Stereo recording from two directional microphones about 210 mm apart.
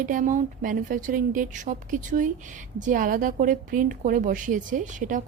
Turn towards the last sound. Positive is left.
turn(degrees=-35)  # may be behind; listen again after turning